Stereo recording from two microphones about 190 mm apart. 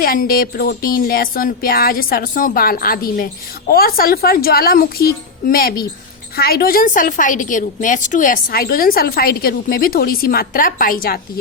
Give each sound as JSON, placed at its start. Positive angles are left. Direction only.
{"t": 0.0, "sound": "a woman's voice", "side_deg": 50}